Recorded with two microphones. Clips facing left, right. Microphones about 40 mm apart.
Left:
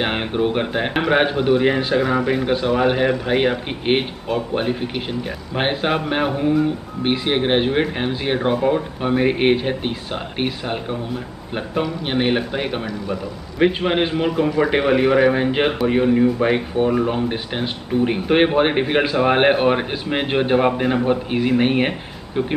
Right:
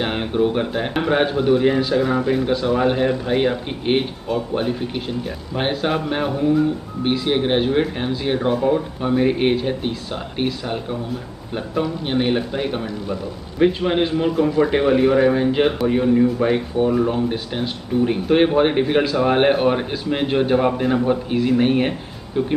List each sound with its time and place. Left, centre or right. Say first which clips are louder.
0.0 s speech: even; left
2.0 s a man's voice: even; left
11.8 s a man's voice: even; left